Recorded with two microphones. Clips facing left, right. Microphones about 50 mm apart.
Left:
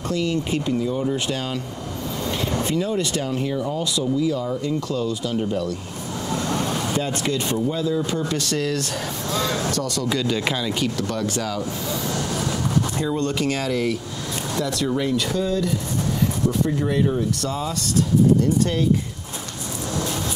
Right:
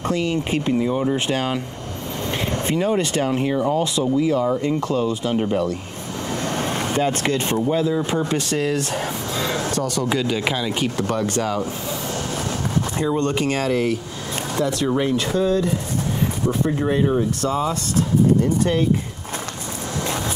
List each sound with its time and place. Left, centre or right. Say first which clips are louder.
0.1 s speech: even; right
10.1 s speech: even; centre
10.7 s speech: right 2 dB; right
13.0 s speech: right 2 dB; right